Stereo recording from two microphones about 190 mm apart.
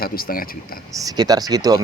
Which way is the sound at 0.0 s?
50° left (ahead or behind).